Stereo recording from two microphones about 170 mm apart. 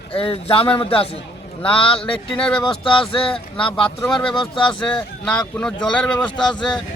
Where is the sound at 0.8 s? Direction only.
30° left (ahead or behind).